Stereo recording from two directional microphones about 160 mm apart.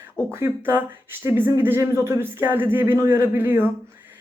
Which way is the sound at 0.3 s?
15° right (ahead or behind).